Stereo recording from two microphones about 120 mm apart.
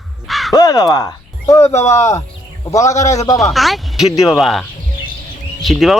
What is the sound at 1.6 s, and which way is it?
Speech, 65° left (ahead or behind).